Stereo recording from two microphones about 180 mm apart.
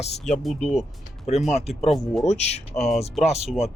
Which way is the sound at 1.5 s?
40° left (ahead or behind).